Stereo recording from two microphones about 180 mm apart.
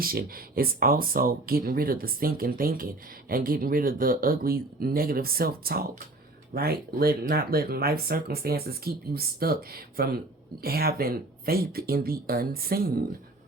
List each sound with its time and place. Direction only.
0.0 s speech: 55° right (ahead or behind)